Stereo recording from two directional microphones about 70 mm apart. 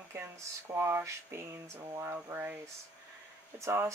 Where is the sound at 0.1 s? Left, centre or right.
Right.